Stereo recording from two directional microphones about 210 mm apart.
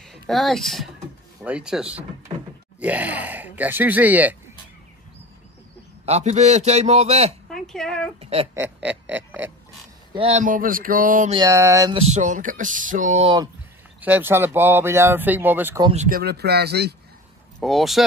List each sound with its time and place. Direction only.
0.0 s speech: centre (ahead or behind)
2.3 s a sound: 25° right (ahead or behind)
2.8 s speech: 5° right (ahead or behind)
6.0 s a man's voice: 30° right (ahead or behind)
7.4 s a sound: centre (ahead or behind)
8.2 s a sound: 30° right (ahead or behind)
8.5 s speech: 10° right (ahead or behind)
10.1 s a man's voice: 30° right (ahead or behind)
11.3 s speech: 15° right (ahead or behind)
12.0 s a man's voice: 35° right (ahead or behind)
14.0 s speech: 10° right (ahead or behind)
15.9 s speech: 40° right (ahead or behind)
17.6 s speech: centre (ahead or behind)